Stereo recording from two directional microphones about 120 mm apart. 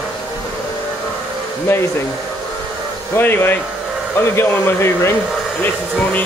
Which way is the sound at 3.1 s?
15° left (ahead or behind).